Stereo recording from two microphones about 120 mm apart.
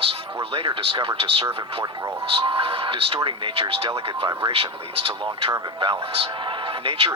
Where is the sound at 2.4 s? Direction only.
50° right (ahead or behind).